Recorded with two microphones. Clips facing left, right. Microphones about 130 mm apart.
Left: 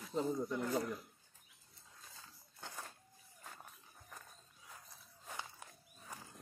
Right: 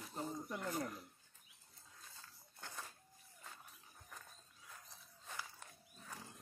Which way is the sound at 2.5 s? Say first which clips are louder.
Left 2 dB; 15° left (ahead or behind).